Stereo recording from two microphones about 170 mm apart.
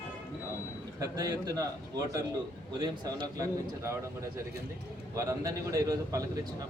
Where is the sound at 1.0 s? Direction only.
25° right (ahead or behind).